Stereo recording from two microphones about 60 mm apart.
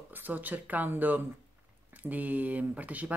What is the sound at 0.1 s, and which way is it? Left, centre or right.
Speech, right.